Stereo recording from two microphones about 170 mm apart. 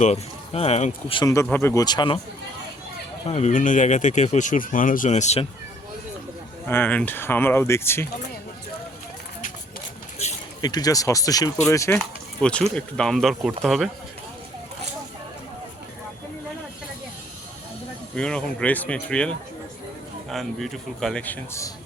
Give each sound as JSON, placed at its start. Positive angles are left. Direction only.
{"t": 0.0, "sound": "speech", "side_deg": 40}
{"t": 1.1, "sound": "speech", "side_deg": 20}
{"t": 3.2, "sound": "speech", "side_deg": 40}
{"t": 6.7, "sound": "speech", "side_deg": 10}
{"t": 10.2, "sound": "a sound", "side_deg": 40}
{"t": 10.6, "sound": "speech", "side_deg": 25}
{"t": 12.4, "sound": "a man's voice", "side_deg": 5}
{"t": 18.1, "sound": "speech", "side_deg": 5}
{"t": 20.3, "sound": "a man's voice", "side_deg": 0}